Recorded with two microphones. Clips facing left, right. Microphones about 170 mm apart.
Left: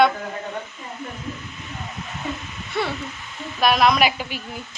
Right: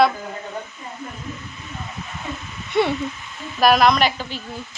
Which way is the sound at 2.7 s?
20° right (ahead or behind).